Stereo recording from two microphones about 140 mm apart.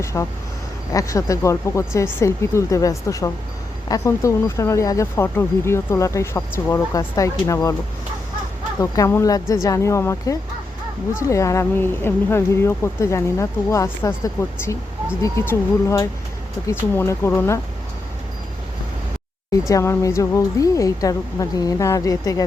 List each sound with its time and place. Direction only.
0.0 s speech: 20° left (ahead or behind)
8.8 s speech: 20° left (ahead or behind)
19.6 s speech: 20° left (ahead or behind)